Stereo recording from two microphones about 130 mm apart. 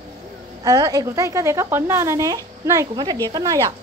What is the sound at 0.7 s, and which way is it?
A woman's voice, 30° right (ahead or behind).